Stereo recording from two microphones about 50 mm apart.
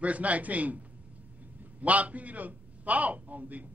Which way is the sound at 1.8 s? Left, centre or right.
Right.